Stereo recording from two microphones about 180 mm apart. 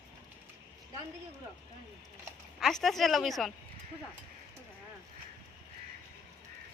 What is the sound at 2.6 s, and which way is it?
Speech, centre (ahead or behind).